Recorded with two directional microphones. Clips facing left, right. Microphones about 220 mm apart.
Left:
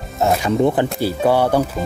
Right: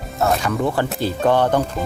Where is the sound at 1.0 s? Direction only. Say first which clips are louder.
Left 1 dB; 10° left (ahead or behind).